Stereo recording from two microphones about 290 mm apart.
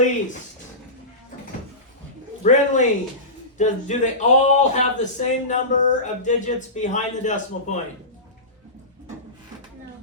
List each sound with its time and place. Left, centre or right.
2.4 s speech: left